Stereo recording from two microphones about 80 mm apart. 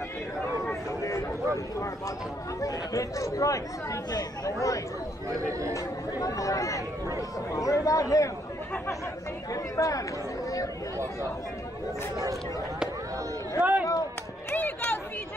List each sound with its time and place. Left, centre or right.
2.6 s speech: left
9.5 s speech: left
13.6 s a sound: centre
14.5 s chatter: left